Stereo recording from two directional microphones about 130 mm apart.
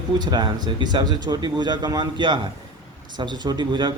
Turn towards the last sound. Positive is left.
turn(degrees=-35)  # may be behind; listen again after turning